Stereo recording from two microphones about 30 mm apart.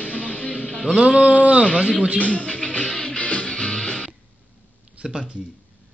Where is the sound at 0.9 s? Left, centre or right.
Right.